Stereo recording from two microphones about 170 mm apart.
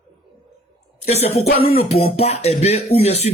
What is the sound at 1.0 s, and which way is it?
Speech, 35° left (ahead or behind).